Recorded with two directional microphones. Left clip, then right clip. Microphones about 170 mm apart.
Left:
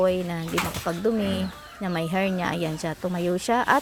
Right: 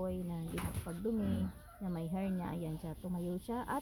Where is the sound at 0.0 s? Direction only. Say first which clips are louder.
Left 18 dB; 30° left (ahead or behind).